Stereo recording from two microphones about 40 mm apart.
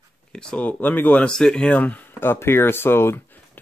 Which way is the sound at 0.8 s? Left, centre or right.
Left.